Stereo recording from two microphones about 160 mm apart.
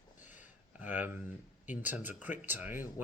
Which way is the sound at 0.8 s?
10° right (ahead or behind).